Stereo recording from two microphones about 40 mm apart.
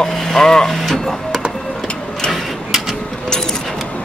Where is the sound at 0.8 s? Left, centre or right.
Centre.